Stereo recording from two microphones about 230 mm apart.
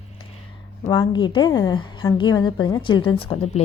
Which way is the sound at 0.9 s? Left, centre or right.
Centre.